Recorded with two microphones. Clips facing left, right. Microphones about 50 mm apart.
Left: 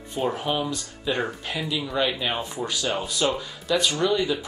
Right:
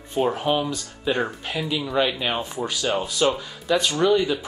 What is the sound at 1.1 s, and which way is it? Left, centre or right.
Speech, right.